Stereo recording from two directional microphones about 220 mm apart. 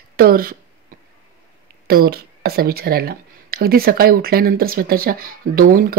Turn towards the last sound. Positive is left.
turn(degrees=-40)  # may be behind; listen again after turning